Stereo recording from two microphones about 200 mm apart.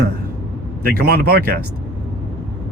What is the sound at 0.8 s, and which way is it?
Speech, 50° right (ahead or behind).